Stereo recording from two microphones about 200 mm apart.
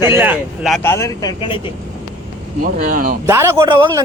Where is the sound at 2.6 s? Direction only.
45° right (ahead or behind).